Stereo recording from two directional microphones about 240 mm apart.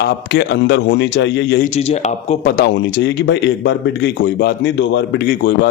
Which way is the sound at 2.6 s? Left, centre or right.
Left.